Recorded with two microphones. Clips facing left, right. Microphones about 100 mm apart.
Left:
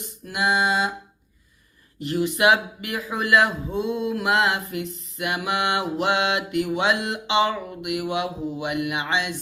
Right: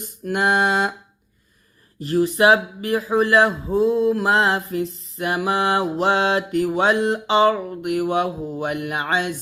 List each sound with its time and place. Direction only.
0.3 s music: 50° right (ahead or behind)
2.0 s speech: 35° right (ahead or behind)